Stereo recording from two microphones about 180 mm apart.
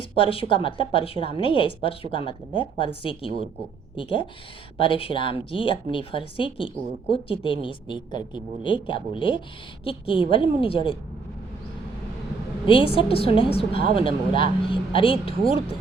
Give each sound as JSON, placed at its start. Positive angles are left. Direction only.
{"t": 0.0, "sound": "a woman's voice", "side_deg": 30}
{"t": 12.6, "sound": "a woman's voice", "side_deg": 30}